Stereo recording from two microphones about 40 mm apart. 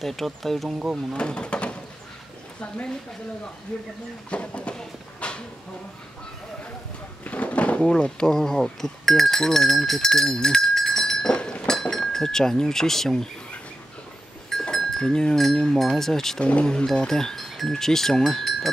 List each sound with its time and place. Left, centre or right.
0.0 s speech: centre
1.1 s speech: left
3.7 s speech: left
5.2 s a sound: left
7.2 s drawer open or close: left
7.8 s speech: left
14.5 s goat: centre
15.0 s speech: centre
16.3 s speech: left
16.8 s speech: centre